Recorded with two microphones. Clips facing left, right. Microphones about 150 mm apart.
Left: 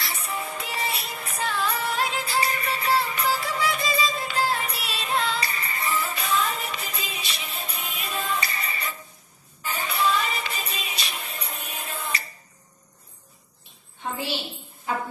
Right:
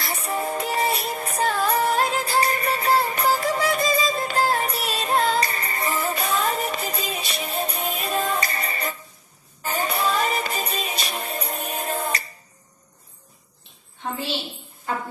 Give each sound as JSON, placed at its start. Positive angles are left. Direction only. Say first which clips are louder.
{"t": 0.0, "sound": "music", "louder": "right 5 dB", "side_deg": -45}